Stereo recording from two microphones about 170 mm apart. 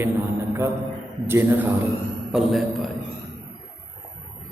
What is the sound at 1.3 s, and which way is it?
Speech, 15° right (ahead or behind).